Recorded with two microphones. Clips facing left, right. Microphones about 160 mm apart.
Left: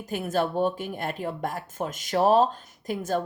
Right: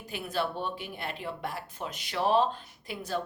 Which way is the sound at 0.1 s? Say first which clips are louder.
Left 6 dB; 45° left (ahead or behind).